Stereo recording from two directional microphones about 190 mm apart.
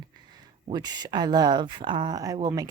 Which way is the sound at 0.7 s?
20° right (ahead or behind).